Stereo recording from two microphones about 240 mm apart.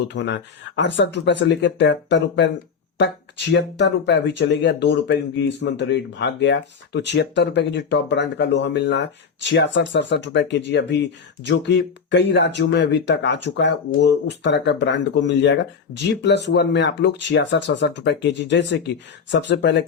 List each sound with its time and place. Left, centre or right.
0.1 s speech: left